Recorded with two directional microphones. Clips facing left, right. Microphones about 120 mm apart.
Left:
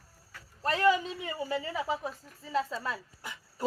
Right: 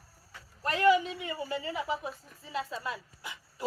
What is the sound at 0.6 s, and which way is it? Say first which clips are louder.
A man's voice: right 1 dB; 30° left (ahead or behind).